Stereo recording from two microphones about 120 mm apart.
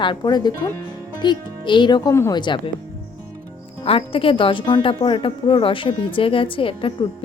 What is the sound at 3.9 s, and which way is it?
A woman's voice, 50° left (ahead or behind).